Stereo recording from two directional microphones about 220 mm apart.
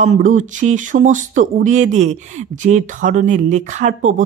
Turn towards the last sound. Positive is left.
turn(degrees=-35)  # may be behind; listen again after turning